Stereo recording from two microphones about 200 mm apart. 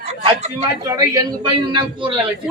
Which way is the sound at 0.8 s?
20° right (ahead or behind).